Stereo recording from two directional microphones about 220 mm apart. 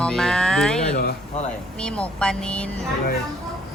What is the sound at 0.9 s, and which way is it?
Speech, 35° left (ahead or behind).